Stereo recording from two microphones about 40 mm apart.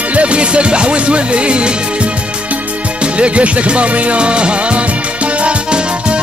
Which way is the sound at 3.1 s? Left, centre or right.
Right.